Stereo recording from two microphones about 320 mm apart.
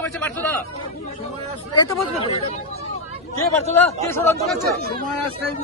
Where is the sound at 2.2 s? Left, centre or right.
Centre.